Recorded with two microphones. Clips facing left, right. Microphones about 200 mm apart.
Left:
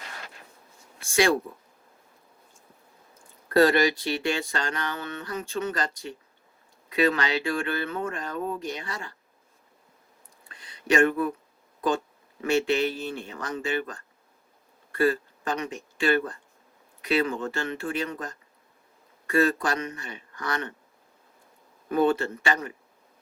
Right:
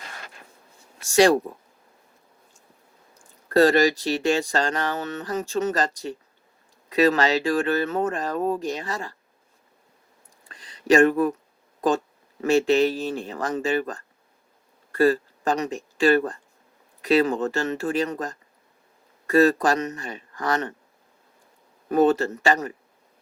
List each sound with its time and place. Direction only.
0.9 s speech: 40° right (ahead or behind)
3.8 s speech: 40° right (ahead or behind)
10.5 s a sound: 40° right (ahead or behind)
12.4 s speech: 40° right (ahead or behind)
19.4 s speech: 45° right (ahead or behind)
21.8 s speech: 45° right (ahead or behind)